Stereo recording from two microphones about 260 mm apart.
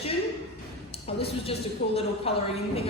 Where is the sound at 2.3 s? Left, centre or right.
Left.